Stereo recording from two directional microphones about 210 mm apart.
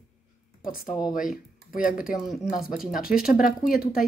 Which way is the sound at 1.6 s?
40° left (ahead or behind).